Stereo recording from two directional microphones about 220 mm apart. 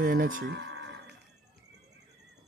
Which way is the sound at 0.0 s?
40° right (ahead or behind).